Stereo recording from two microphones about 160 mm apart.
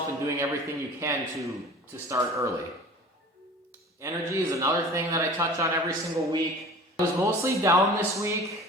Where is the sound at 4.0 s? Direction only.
20° right (ahead or behind).